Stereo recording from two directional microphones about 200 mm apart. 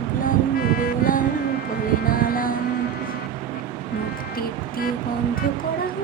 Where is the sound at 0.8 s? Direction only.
45° left (ahead or behind).